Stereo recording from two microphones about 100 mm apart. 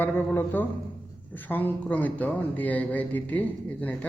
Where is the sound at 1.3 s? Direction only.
20° left (ahead or behind).